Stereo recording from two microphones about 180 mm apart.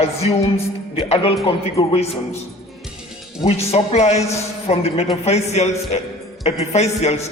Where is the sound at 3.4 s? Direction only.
35° left (ahead or behind).